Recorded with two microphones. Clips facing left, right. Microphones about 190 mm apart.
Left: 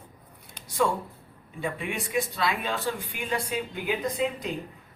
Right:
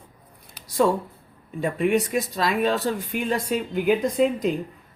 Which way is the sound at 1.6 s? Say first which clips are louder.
Right 10 dB; 40° right (ahead or behind).